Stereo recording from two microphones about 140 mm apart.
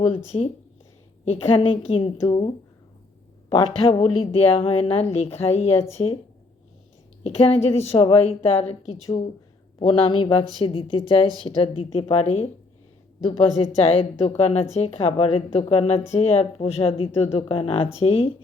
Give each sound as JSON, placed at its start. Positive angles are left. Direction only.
{"t": 0.3, "sound": "a woman's voice", "side_deg": 40}
{"t": 3.5, "sound": "a woman's voice", "side_deg": 40}
{"t": 7.3, "sound": "a woman's voice", "side_deg": 45}
{"t": 9.8, "sound": "a woman's voice", "side_deg": 40}